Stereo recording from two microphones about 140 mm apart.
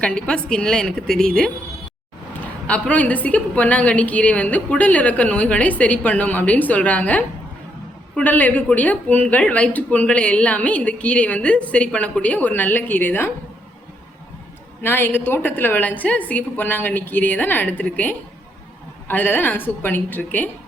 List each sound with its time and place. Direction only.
0.0 s a woman's voice: 5° left (ahead or behind)
2.6 s speech: 10° left (ahead or behind)
14.8 s speech: 15° left (ahead or behind)